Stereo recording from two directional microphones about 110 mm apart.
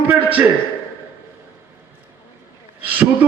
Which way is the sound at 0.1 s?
15° right (ahead or behind).